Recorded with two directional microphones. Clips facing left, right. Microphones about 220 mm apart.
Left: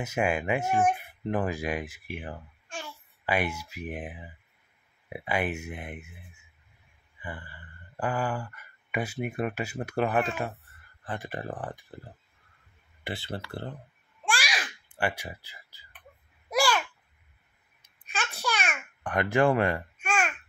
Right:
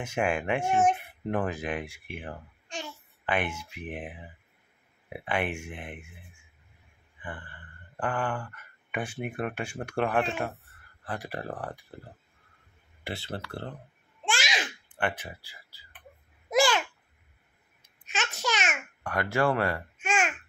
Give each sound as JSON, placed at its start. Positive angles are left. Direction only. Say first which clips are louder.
{"t": 0.0, "sound": "speech", "louder": "left 1 dB", "side_deg": 5}
{"t": 14.2, "sound": "babbling", "louder": "even", "side_deg": -20}
{"t": 15.0, "sound": "speech", "louder": "left 1 dB", "side_deg": 10}
{"t": 16.4, "sound": "babbling", "louder": "right 2 dB", "side_deg": -20}
{"t": 18.2, "sound": "babbling", "louder": "right 1 dB", "side_deg": -20}
{"t": 19.0, "sound": "speech", "louder": "left 3 dB", "side_deg": 15}
{"t": 20.0, "sound": "babbling", "louder": "right 1 dB", "side_deg": -15}